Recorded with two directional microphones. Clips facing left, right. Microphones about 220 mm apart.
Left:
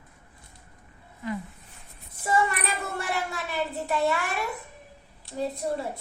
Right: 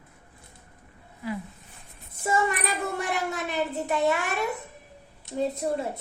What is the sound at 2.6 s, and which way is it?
A child's voice, 20° right (ahead or behind).